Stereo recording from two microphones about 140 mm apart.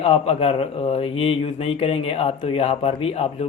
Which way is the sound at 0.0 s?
40° left (ahead or behind).